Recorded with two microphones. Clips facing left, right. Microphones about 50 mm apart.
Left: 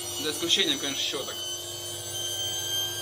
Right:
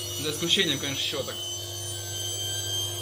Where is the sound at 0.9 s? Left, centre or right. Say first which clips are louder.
Right 1 dB; centre.